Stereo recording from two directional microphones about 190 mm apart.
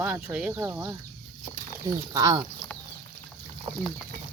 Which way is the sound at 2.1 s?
20° right (ahead or behind).